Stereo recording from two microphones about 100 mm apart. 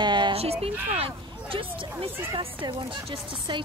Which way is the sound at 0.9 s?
65° right (ahead or behind).